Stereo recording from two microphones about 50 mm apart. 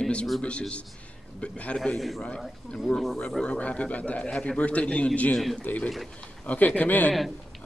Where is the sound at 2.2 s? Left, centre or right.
Left.